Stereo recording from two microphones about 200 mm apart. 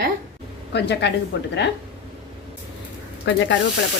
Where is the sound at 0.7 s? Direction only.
60° left (ahead or behind).